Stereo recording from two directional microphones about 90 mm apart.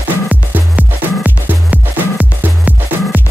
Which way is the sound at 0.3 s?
15° right (ahead or behind).